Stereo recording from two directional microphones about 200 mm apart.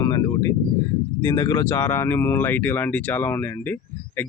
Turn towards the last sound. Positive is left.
turn(degrees=10)  # may be behind; listen again after turning